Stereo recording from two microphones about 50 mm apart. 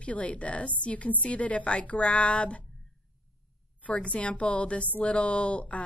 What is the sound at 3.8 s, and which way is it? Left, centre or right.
A woman's voice, left.